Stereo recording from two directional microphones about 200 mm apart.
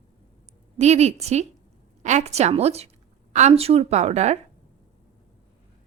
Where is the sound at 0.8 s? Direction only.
35° right (ahead or behind).